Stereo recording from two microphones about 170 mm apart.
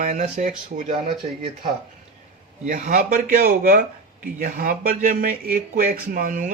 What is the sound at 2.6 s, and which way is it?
Speech, 50° right (ahead or behind).